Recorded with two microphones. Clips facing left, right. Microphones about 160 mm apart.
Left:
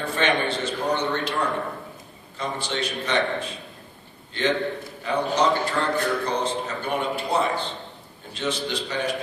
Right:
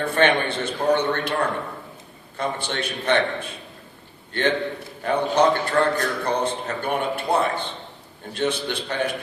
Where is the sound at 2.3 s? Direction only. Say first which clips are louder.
Right 2 dB; 55° right (ahead or behind).